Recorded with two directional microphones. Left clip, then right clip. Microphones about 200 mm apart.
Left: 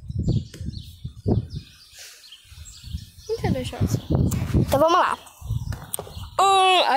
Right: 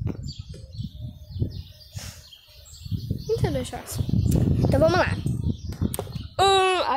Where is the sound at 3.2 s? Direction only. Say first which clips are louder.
Even; 20° right (ahead or behind).